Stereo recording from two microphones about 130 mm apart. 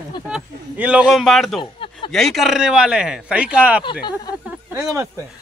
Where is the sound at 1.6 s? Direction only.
40° left (ahead or behind).